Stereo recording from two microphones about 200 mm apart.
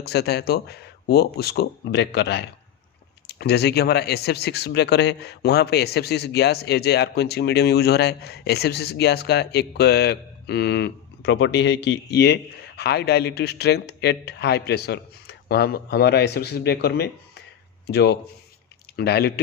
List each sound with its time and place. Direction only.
0.0 s speech: 55° left (ahead or behind)